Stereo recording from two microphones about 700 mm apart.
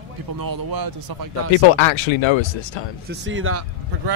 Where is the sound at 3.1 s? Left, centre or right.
Centre.